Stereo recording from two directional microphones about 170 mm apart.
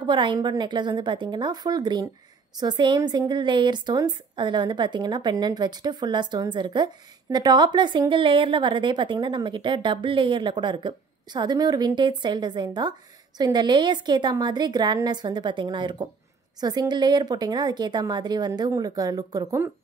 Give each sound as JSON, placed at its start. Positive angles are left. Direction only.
{"t": 0.0, "sound": "a woman's voice", "side_deg": -25}